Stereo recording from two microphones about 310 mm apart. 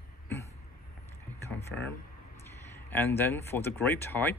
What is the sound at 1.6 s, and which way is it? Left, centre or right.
Speech, centre.